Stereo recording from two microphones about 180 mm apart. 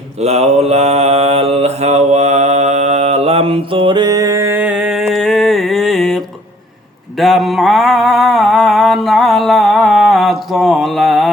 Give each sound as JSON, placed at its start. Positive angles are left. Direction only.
{"t": 0.2, "sound": "mantra", "side_deg": -35}